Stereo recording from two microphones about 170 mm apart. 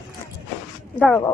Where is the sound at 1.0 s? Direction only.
10° left (ahead or behind).